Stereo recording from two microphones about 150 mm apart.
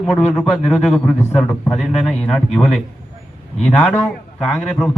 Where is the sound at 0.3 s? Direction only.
10° left (ahead or behind).